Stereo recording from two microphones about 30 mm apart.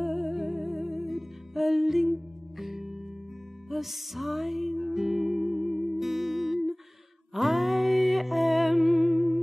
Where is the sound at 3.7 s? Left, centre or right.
Centre.